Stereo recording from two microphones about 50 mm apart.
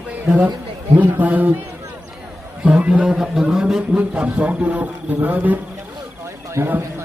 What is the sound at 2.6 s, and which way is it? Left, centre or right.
Speech, right.